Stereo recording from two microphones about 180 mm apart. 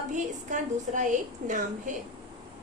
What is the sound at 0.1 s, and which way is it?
A woman's voice, 45° right (ahead or behind).